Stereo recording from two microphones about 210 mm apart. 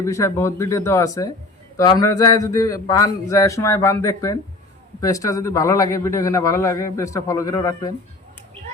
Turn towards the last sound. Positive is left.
turn(degrees=15)  # may be behind; listen again after turning